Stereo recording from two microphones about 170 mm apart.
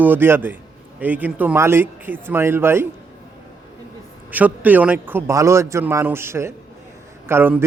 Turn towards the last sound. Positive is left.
turn(degrees=-10)  # may be behind; listen again after turning